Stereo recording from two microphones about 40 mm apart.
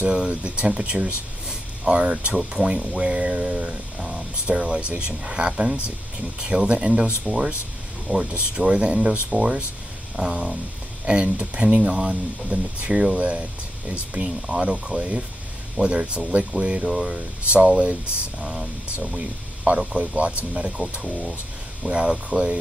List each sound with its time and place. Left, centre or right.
0.1 s speech: right
9.3 s speech: right
10.1 s speech: centre
11.3 s speech: right
18.4 s speech: centre
19.9 s speech: right
21.8 s speech: right